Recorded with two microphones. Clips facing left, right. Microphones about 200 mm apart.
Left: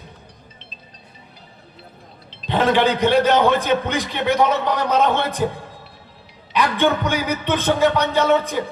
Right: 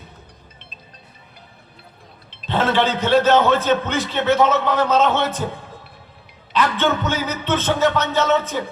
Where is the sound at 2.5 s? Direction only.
15° left (ahead or behind).